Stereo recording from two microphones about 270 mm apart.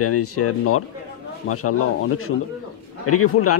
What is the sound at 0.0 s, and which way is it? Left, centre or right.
Speech, left.